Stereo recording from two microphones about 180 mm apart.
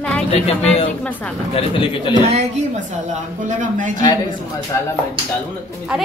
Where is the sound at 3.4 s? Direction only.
45° right (ahead or behind).